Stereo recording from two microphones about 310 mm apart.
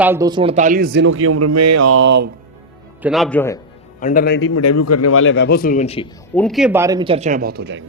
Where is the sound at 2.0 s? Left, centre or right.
Right.